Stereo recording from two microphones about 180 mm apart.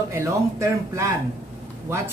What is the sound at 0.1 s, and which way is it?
A man's voice, 15° right (ahead or behind).